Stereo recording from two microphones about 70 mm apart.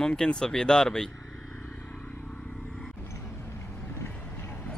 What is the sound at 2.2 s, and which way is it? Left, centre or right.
Vehicle, centre.